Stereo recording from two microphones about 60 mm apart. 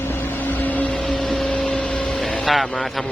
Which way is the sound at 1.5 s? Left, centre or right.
Left.